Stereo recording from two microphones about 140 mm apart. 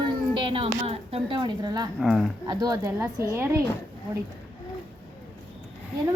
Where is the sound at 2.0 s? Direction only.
5° right (ahead or behind).